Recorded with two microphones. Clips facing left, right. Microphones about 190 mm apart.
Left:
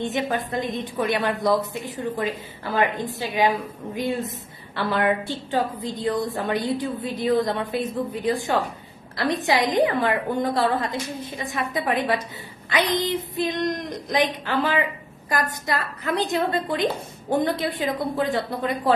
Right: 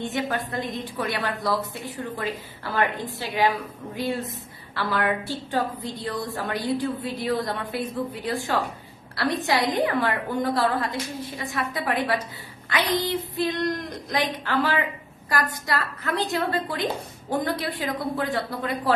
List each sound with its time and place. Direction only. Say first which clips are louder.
0.0 s a woman's voice: left 2 dB; 20° left (ahead or behind)